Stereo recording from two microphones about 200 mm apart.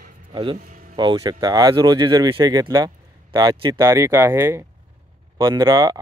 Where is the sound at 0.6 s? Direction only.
40° right (ahead or behind).